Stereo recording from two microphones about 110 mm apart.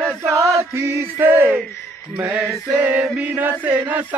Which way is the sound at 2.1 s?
25° right (ahead or behind).